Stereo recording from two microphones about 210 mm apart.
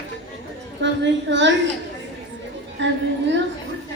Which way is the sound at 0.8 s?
60° right (ahead or behind).